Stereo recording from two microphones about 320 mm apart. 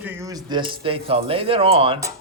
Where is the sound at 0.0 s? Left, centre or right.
Centre.